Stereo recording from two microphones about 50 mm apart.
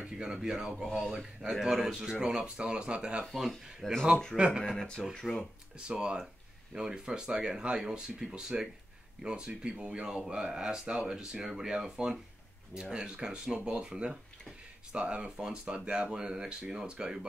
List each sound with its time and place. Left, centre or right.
0.0 s speech: centre
3.3 s speech: centre
4.4 s speech: right
4.6 s speech: centre
5.8 s speech: centre